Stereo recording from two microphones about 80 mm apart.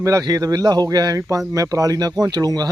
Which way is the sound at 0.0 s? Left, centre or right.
Right.